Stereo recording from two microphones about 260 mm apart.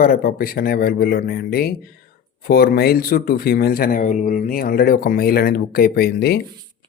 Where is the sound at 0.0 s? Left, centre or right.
Left.